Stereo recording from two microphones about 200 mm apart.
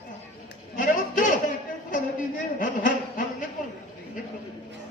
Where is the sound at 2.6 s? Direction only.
40° left (ahead or behind).